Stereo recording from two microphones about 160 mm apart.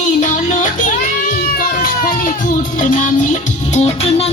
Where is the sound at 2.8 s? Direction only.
55° left (ahead or behind).